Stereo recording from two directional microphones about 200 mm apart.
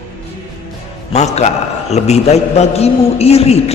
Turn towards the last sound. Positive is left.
turn(degrees=30)  # may be behind; listen again after turning